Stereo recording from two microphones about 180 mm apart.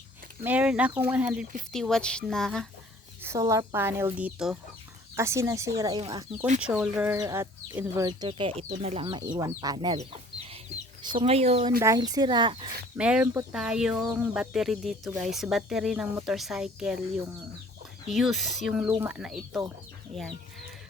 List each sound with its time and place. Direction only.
0.4 s speech: 10° right (ahead or behind)
3.2 s speech: 15° right (ahead or behind)
5.1 s speech: 15° right (ahead or behind)
6.6 s speech: 5° right (ahead or behind); by 10.0 s 25° right (ahead or behind)
10.0 s chicken: 35° right (ahead or behind)
11.0 s speech: 25° right (ahead or behind)
11.8 s speech: 20° right (ahead or behind)
13.0 s speech: 5° right (ahead or behind)
18.1 s speech: centre (ahead or behind)